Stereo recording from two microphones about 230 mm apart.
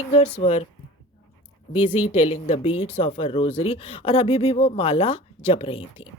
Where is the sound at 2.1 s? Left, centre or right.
Left.